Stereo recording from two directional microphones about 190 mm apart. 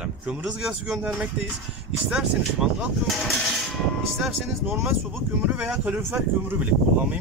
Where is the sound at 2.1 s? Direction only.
5° right (ahead or behind).